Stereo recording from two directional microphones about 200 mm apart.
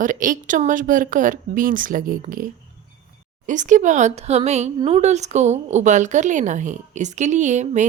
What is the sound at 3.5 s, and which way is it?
A woman's voice, 40° right (ahead or behind).